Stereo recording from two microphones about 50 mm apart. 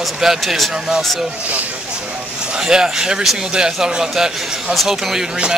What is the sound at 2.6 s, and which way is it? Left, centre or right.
Speech, centre.